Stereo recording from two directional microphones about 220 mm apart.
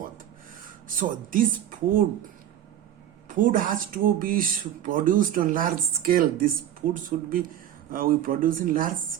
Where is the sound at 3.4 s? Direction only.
35° right (ahead or behind).